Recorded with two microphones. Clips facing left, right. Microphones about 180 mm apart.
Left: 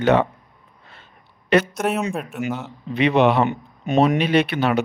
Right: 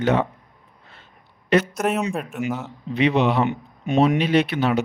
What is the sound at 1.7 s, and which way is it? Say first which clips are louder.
Speech: even; centre (ahead or behind).